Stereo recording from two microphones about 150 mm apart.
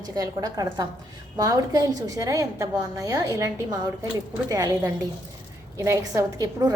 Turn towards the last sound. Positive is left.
turn(degrees=-25)  # may be behind; listen again after turning